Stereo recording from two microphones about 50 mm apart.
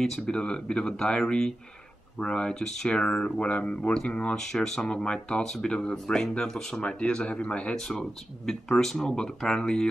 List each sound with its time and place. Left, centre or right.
0.0 s speech: centre
7.7 s speech: centre